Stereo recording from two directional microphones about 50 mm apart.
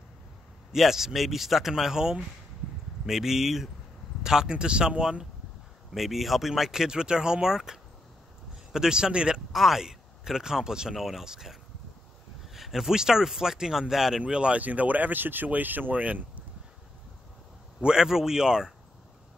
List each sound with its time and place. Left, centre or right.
0.7 s speech: centre
5.9 s speech: centre
9.5 s speech: centre
11.0 s speech: centre
12.5 s speech: centre
14.2 s speech: right
17.8 s speech: centre